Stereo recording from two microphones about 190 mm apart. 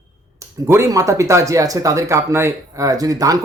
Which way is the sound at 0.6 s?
15° right (ahead or behind).